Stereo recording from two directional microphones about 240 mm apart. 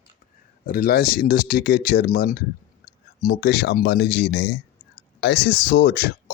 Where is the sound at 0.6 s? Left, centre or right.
Left.